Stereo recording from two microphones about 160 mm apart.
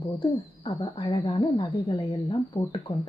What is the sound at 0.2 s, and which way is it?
A woman's voice, 30° left (ahead or behind).